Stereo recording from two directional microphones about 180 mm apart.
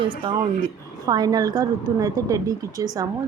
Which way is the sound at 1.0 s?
20° right (ahead or behind).